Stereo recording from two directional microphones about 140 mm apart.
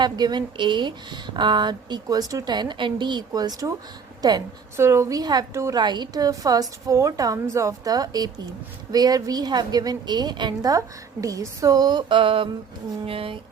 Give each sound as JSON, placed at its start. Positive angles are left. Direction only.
{"t": 0.0, "sound": "a woman's voice", "side_deg": -30}